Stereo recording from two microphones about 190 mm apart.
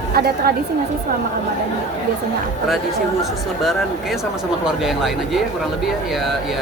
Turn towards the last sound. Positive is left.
turn(degrees=0)  # may be behind; listen again after turning